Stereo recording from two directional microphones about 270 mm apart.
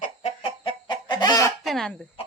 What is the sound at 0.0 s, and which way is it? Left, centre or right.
Chicken, left.